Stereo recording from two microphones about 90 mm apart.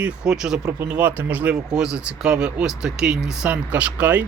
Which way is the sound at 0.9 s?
15° right (ahead or behind).